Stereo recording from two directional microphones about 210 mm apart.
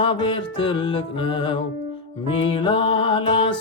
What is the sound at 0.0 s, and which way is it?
Music, 25° left (ahead or behind).